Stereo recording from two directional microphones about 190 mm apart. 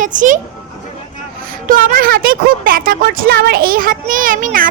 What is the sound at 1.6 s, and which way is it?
A woman's voice, 45° right (ahead or behind).